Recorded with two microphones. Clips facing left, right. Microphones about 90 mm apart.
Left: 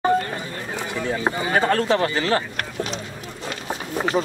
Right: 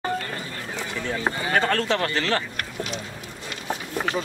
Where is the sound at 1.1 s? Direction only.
15° left (ahead or behind).